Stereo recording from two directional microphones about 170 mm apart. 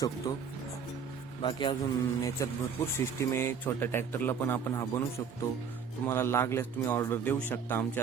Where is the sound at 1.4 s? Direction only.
30° left (ahead or behind).